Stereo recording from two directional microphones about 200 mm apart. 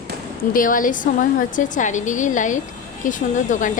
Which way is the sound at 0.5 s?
40° left (ahead or behind).